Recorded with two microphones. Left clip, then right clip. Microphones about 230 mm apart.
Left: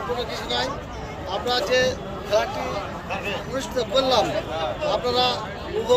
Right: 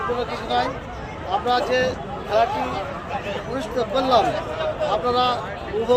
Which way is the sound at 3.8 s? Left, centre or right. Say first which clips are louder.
Right 2 dB; centre.